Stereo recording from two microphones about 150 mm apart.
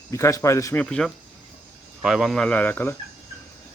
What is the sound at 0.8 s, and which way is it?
Speech, 5° left (ahead or behind).